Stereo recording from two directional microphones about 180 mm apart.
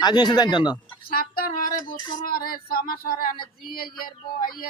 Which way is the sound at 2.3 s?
55° left (ahead or behind).